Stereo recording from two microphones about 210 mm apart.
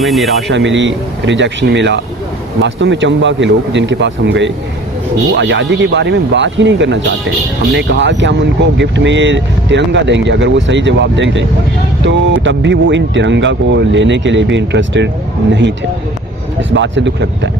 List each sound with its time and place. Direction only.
0.0 s speech: centre (ahead or behind)
0.5 s speech: 60° right (ahead or behind)
16.7 s speech: 60° right (ahead or behind)